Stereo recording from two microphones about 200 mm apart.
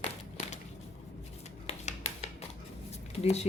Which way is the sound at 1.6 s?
35° left (ahead or behind).